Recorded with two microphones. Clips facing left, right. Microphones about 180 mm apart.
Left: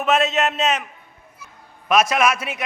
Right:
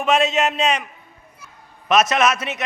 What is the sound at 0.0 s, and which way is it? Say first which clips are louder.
Speech: right 1 dB; centre (ahead or behind).